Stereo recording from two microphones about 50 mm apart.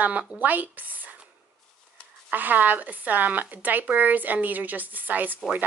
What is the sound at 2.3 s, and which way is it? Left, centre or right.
Speech, right.